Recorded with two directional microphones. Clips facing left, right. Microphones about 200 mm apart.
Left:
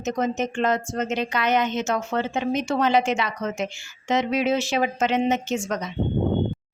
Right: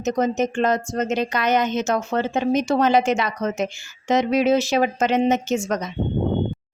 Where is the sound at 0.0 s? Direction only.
40° right (ahead or behind).